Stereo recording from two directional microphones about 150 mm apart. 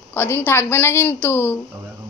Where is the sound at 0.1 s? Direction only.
15° left (ahead or behind).